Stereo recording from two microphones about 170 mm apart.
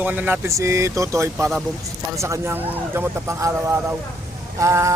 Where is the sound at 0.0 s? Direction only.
10° right (ahead or behind).